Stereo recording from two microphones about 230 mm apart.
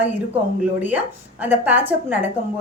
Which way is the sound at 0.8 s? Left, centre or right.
Centre.